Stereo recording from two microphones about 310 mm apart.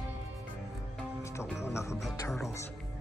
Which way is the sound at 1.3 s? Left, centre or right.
Centre.